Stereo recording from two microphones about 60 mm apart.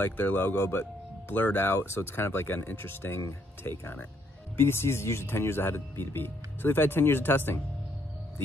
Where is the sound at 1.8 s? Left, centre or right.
Left.